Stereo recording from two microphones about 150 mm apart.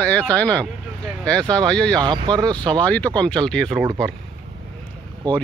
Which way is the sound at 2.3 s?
30° right (ahead or behind).